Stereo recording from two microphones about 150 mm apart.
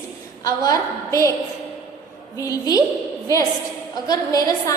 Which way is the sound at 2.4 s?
25° left (ahead or behind).